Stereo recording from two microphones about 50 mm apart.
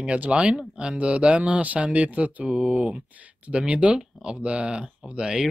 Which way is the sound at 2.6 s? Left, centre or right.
Centre.